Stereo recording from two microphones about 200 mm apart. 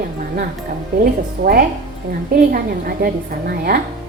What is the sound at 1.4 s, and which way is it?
A woman's voice, 45° right (ahead or behind).